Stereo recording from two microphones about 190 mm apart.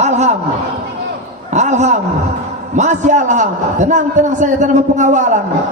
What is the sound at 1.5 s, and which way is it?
A man's voice, 40° right (ahead or behind).